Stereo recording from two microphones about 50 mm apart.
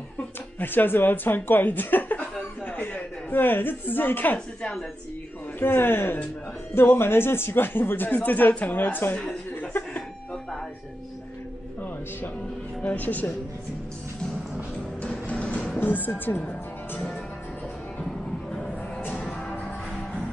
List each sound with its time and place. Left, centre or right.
0.6 s a woman's voice: left
5.6 s speech: left
9.3 s chuckle: left
12.8 s speech: left
15.0 s music: left
15.8 s speech: left
16.4 s music: left
17.9 s music: centre
18.9 s music: left
19.2 s music: centre